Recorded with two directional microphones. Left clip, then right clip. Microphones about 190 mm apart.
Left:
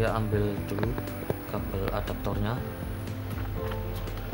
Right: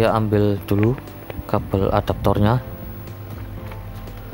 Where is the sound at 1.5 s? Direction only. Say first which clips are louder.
Right 16 dB; 55° right (ahead or behind).